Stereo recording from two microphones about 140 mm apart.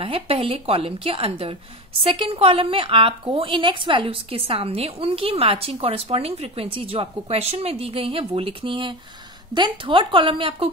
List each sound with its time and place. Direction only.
0.0 s a woman's voice: 45° right (ahead or behind)